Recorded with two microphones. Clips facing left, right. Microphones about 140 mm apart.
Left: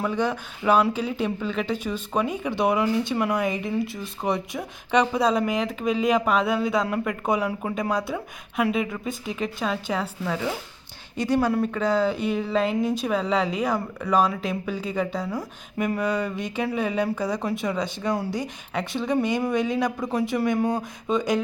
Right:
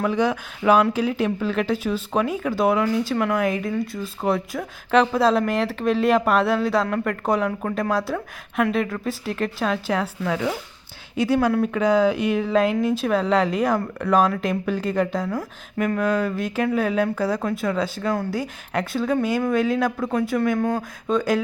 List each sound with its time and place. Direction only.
0.0 s a woman's voice: 10° right (ahead or behind)
11.5 s a woman's voice: centre (ahead or behind)
11.8 s a woman's voice: 10° right (ahead or behind)
13.7 s a woman's voice: 10° left (ahead or behind)
16.0 s a woman's voice: 5° right (ahead or behind)
20.6 s speech: 15° left (ahead or behind)
21.1 s a woman's voice: centre (ahead or behind)